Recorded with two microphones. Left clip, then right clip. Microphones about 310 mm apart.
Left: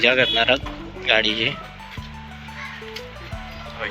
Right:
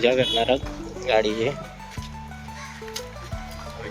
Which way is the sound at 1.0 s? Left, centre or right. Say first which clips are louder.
Left 2 dB; centre.